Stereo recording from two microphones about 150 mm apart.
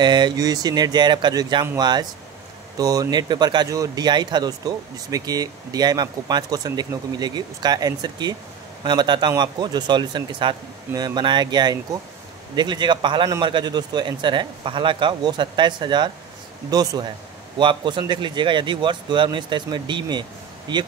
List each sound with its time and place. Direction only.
0.0 s speech: 30° right (ahead or behind)